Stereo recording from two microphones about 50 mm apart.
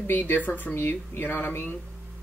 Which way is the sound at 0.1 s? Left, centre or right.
Left.